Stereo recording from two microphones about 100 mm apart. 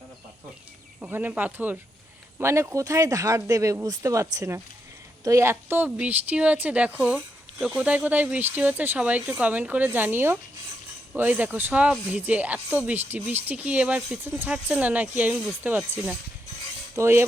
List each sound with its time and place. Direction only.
1.3 s speech: 15° right (ahead or behind)
2.4 s speech: 30° right (ahead or behind)